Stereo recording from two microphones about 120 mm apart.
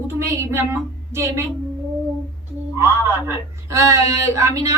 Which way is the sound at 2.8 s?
20° right (ahead or behind).